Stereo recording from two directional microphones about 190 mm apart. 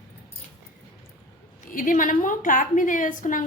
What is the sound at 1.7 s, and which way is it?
A woman's voice, 45° left (ahead or behind).